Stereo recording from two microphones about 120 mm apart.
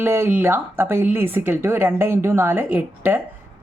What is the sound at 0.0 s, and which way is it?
Speech, 20° right (ahead or behind).